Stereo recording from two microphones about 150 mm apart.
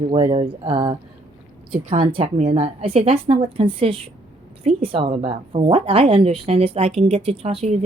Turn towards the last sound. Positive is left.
turn(degrees=-45)  # may be behind; listen again after turning